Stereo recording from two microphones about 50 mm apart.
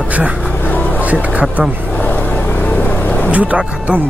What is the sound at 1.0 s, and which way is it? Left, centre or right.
Speech, right.